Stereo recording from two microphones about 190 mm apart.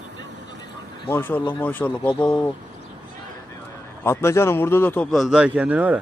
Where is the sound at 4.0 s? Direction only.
15° left (ahead or behind); by 6.0 s 10° right (ahead or behind).